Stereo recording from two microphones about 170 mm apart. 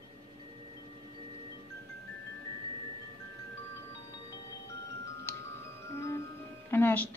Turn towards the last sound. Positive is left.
turn(degrees=15)  # may be behind; listen again after turning